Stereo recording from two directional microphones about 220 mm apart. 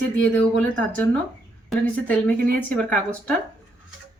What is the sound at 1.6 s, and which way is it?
A woman's voice, 5° left (ahead or behind).